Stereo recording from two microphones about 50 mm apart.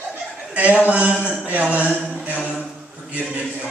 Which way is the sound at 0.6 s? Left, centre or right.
Right.